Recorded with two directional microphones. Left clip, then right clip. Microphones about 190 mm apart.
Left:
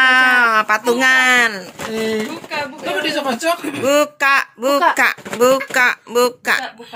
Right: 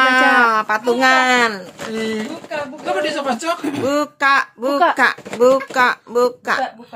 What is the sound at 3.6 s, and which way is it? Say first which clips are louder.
Speech: right 1 dB; 60° right (ahead or behind).